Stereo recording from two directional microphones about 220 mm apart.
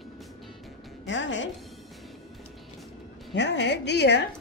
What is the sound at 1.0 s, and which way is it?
Speech, 55° left (ahead or behind).